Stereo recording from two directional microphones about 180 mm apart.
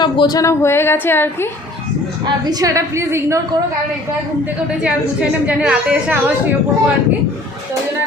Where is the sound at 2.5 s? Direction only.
20° right (ahead or behind).